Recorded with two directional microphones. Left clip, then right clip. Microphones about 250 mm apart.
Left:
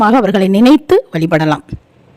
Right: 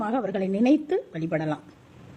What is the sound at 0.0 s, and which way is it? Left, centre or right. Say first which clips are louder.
Speech: left 17 dB; left.